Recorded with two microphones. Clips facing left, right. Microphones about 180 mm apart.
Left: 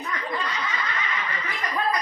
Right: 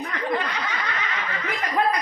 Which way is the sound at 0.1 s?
65° right (ahead or behind).